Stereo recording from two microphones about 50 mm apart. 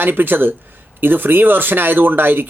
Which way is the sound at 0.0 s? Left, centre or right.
Right.